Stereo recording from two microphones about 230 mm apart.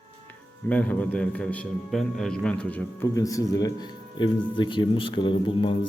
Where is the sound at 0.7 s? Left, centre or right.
Centre.